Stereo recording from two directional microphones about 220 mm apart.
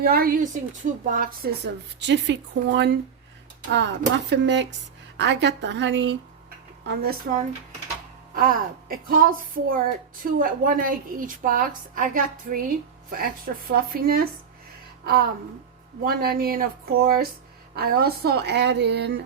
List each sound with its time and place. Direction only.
0.0 s a woman's voice: 40° right (ahead or behind)
16.0 s a woman's voice: 40° right (ahead or behind)
17.7 s a woman's voice: 45° right (ahead or behind)